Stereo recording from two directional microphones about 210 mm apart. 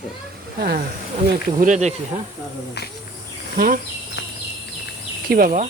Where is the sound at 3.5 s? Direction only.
45° right (ahead or behind).